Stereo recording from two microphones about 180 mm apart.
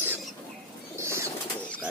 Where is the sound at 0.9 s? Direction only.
15° right (ahead or behind).